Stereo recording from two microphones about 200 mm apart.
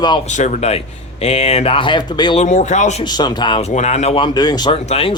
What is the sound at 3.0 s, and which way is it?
Speech, 20° left (ahead or behind).